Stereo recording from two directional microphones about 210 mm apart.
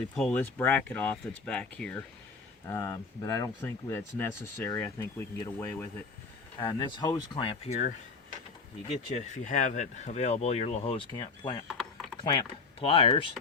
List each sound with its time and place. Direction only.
0.2 s speech: 5° left (ahead or behind); by 13.3 s 25° left (ahead or behind)